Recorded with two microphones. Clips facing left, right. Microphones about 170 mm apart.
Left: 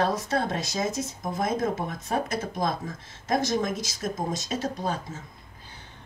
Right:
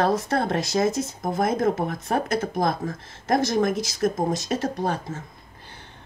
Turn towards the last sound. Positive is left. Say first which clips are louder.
# right 4 dB
turn(degrees=-60)  # may be behind; listen again after turning